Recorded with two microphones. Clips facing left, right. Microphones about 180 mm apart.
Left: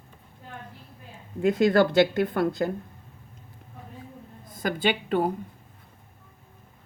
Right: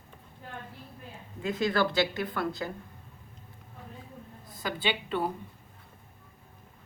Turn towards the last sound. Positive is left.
turn(degrees=50)  # may be behind; listen again after turning